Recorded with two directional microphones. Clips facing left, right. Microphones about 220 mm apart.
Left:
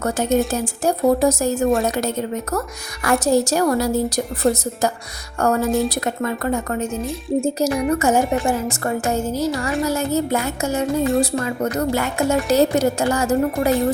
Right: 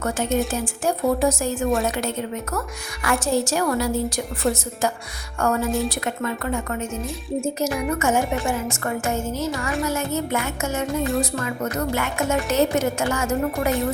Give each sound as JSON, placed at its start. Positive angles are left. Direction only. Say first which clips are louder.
{"t": 0.0, "sound": "a woman's voice", "louder": "left 4 dB", "side_deg": 40}